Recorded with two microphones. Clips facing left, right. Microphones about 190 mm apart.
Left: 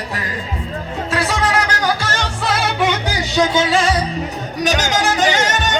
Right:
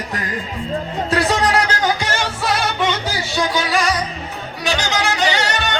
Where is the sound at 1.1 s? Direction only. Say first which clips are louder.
Right 2 dB; 35° right (ahead or behind).